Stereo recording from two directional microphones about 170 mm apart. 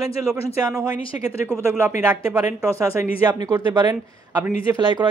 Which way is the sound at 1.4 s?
15° right (ahead or behind).